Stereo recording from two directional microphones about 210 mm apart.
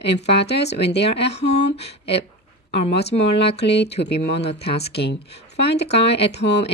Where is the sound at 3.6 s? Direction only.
55° left (ahead or behind).